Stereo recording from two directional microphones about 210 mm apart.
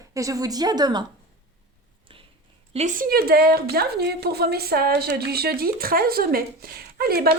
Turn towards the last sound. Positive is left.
turn(degrees=-45)  # may be behind; listen again after turning